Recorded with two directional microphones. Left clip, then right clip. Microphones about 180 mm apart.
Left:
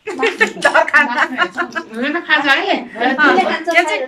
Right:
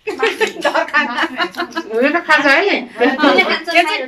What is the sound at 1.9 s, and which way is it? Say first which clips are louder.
Speech: right 3 dB; 30° right (ahead or behind).